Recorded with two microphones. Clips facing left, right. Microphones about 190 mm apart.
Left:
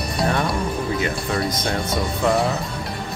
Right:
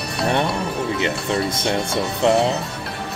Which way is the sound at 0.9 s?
25° right (ahead or behind).